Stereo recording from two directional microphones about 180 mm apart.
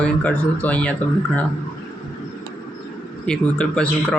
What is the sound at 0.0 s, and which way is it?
Speech, 10° left (ahead or behind).